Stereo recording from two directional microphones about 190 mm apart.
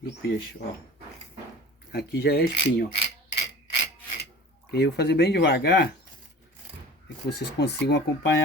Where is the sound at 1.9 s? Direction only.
55° left (ahead or behind).